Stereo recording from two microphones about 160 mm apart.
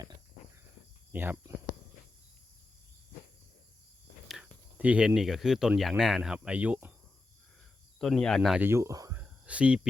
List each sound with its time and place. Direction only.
1.1 s speech: 10° right (ahead or behind)
4.8 s speech: 5° right (ahead or behind)
7.9 s speech: 5° left (ahead or behind)
8.6 s speech: 15° right (ahead or behind)
9.5 s speech: 5° right (ahead or behind)